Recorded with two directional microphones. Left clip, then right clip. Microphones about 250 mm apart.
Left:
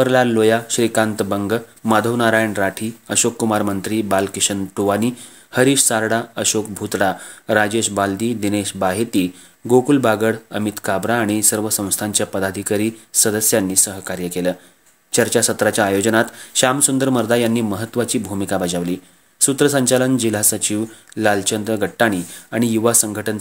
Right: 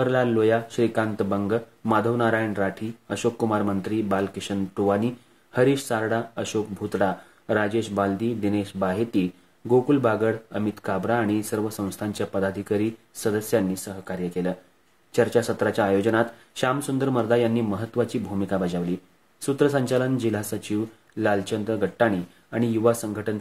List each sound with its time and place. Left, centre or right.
0.0 s speech: left